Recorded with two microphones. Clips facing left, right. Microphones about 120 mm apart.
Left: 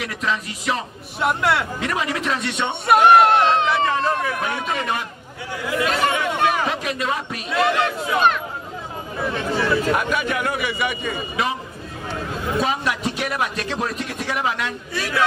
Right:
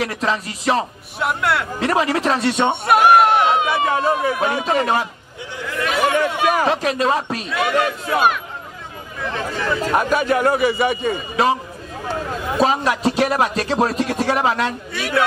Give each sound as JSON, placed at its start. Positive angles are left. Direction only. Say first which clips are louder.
{"t": 0.0, "sound": "a man's voice", "louder": "right 4 dB", "side_deg": -35}
{"t": 1.2, "sound": "speech", "louder": "even", "side_deg": 0}
{"t": 1.8, "sound": "a man's voice", "louder": "right 6 dB", "side_deg": -35}
{"t": 2.7, "sound": "speech", "louder": "left 1 dB", "side_deg": 0}
{"t": 4.2, "sound": "a man's voice", "louder": "right 5 dB", "side_deg": -35}
{"t": 5.9, "sound": "speech", "louder": "right 3 dB", "side_deg": -5}
{"t": 6.2, "sound": "a sound", "louder": "right 2 dB", "side_deg": -5}
{"t": 6.6, "sound": "a man's voice", "louder": "right 6 dB", "side_deg": -35}
{"t": 7.8, "sound": "speech", "louder": "right 1 dB", "side_deg": -5}
{"t": 9.9, "sound": "a man's voice", "louder": "right 5 dB", "side_deg": -35}
{"t": 15.0, "sound": "speech", "louder": "right 2 dB", "side_deg": 0}